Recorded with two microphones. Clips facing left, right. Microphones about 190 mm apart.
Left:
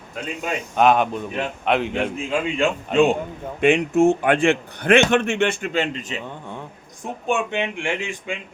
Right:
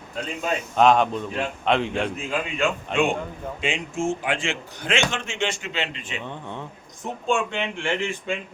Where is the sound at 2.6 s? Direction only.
35° left (ahead or behind).